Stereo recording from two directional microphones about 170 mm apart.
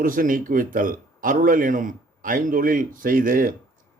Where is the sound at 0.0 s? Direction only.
55° right (ahead or behind).